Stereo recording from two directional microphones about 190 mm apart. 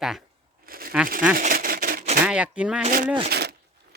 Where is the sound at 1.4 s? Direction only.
50° right (ahead or behind).